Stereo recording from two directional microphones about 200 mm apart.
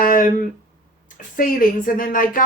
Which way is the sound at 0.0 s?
45° left (ahead or behind).